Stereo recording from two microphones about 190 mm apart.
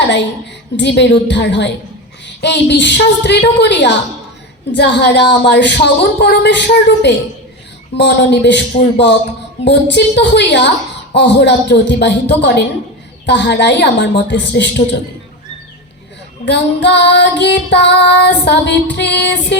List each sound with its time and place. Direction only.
0.8 s music: 65° left (ahead or behind)
16.5 s music: 65° left (ahead or behind)